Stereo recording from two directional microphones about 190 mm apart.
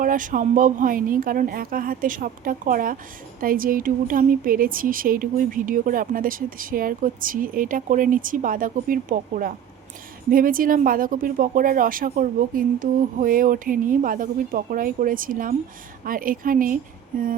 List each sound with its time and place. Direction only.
0.0 s a woman's voice: 45° right (ahead or behind)